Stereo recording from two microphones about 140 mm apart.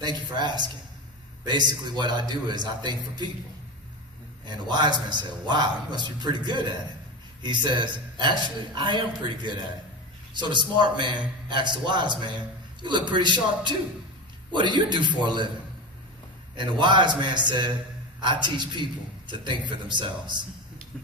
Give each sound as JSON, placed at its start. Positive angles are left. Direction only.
{"t": 0.0, "sound": "a man's voice", "side_deg": -30}
{"t": 4.5, "sound": "a man's voice", "side_deg": -30}
{"t": 16.5, "sound": "a man's voice", "side_deg": -35}